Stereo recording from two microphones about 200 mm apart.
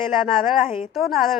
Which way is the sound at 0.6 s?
35° left (ahead or behind).